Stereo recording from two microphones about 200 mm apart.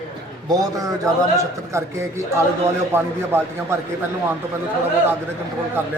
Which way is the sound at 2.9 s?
10° right (ahead or behind).